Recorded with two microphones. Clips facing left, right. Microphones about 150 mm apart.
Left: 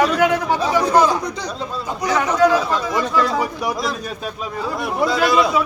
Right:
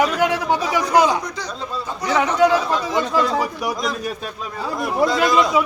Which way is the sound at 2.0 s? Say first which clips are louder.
Even; 10° left (ahead or behind).